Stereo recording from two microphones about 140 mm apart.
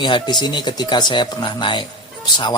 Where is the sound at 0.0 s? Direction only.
30° left (ahead or behind).